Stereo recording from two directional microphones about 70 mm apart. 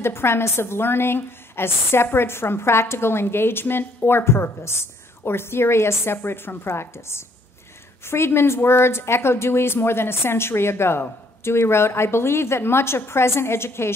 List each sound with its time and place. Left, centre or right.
0.0 s a woman's voice: left